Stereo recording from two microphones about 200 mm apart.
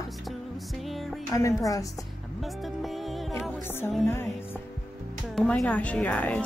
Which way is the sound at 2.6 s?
Centre (ahead or behind).